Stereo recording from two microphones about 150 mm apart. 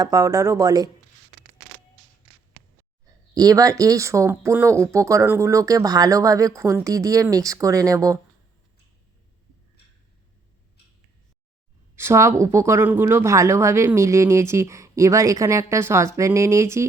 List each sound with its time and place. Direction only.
0.0 s speech: 20° right (ahead or behind)
3.3 s speech: 25° right (ahead or behind)
11.9 s speech: 20° right (ahead or behind)